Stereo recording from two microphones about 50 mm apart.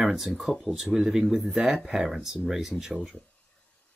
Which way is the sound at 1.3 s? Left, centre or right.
Right.